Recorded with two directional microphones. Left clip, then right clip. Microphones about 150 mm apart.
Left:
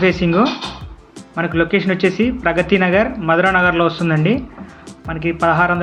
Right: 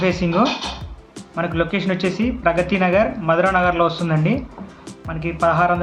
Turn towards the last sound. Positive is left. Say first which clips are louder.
# left 2 dB
turn(degrees=15)  # may be behind; listen again after turning